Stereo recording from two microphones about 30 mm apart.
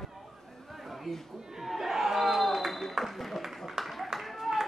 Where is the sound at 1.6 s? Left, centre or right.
Centre.